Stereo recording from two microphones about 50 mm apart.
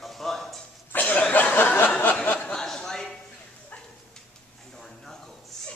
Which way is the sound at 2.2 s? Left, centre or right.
Left.